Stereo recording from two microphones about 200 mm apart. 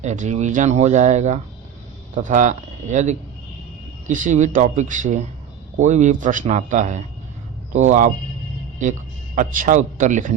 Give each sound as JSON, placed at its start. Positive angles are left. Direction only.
{"t": 0.0, "sound": "a man's voice", "side_deg": -35}